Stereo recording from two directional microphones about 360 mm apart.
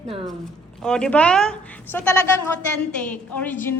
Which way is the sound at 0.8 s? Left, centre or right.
Centre.